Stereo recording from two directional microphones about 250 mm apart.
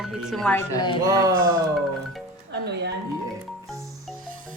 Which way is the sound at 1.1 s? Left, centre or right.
Centre.